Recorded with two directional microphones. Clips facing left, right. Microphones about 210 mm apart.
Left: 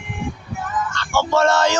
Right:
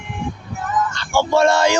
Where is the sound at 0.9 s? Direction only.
10° right (ahead or behind).